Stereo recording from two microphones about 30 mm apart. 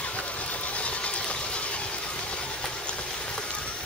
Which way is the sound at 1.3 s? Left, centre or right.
Left.